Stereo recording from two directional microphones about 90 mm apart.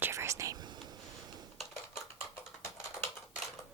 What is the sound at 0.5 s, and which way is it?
Whispering, 50° right (ahead or behind).